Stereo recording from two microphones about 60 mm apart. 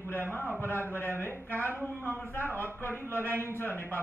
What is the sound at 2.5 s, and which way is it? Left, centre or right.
A man's voice, right.